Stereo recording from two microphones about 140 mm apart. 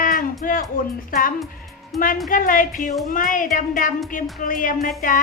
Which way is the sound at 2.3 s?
75° left (ahead or behind).